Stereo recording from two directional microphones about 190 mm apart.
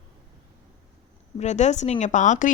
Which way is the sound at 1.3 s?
35° left (ahead or behind).